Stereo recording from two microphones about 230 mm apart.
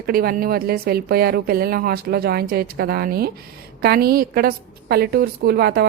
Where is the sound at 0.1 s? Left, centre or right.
Right.